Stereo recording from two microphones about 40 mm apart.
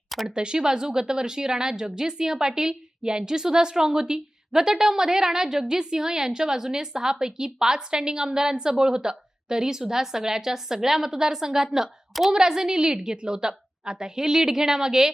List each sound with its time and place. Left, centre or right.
0.3 s a woman's voice: right